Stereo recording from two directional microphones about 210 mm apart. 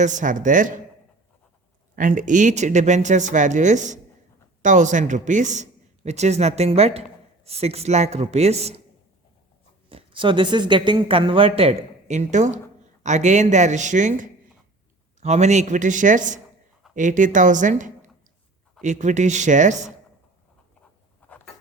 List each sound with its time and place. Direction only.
0.0 s a man's voice: 40° right (ahead or behind)
2.0 s a man's voice: 35° right (ahead or behind)
9.9 s a man's voice: 25° right (ahead or behind)
21.2 s a sound: 5° left (ahead or behind)